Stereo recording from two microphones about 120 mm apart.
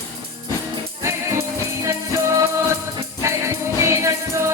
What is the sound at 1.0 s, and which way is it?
Music, 25° right (ahead or behind).